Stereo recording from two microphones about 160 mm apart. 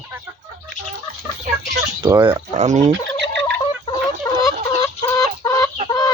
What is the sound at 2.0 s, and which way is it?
Speech, 30° right (ahead or behind).